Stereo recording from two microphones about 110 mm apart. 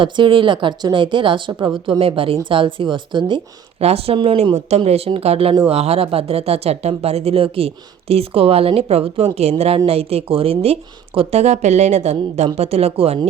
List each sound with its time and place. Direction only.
0.0 s a woman's voice: 50° right (ahead or behind)
3.8 s speech: 65° right (ahead or behind)
4.8 s speech: 65° right (ahead or behind); by 12.5 s 80° right
12.5 s speech: 70° right (ahead or behind)